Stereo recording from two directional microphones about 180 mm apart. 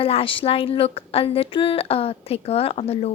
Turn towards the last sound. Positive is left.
turn(degrees=35)  # may be behind; listen again after turning